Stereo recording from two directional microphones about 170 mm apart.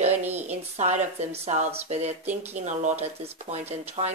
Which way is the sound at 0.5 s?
40° right (ahead or behind).